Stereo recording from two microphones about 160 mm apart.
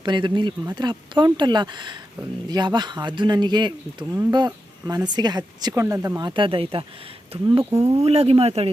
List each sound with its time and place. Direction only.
0.0 s speech: 30° right (ahead or behind)